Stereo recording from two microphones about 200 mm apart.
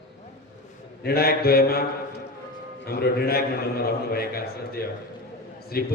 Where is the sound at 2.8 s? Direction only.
50° left (ahead or behind).